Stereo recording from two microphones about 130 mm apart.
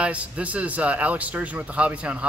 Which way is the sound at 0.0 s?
10° right (ahead or behind).